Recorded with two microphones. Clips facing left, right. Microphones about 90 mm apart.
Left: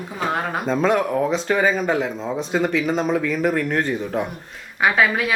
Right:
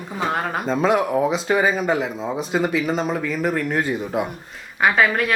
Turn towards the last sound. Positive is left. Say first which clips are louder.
# right 1 dB
turn(degrees=0)  # may be behind; listen again after turning